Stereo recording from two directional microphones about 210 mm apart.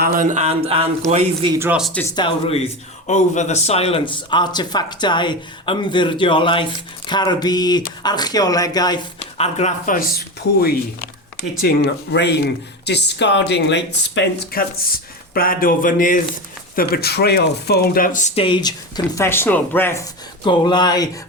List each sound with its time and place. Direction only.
0.0 s a man's voice: 40° right (ahead or behind)
1.5 s speech: 10° right (ahead or behind)
1.9 s speech: 10° left (ahead or behind)
2.1 s speech: 25° left (ahead or behind)
9.4 s speech: 30° left (ahead or behind)